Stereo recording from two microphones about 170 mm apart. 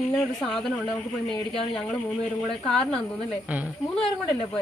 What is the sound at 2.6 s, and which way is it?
Speech, 5° left (ahead or behind).